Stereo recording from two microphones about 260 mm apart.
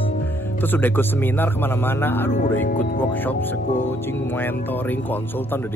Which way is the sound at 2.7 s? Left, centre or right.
Left.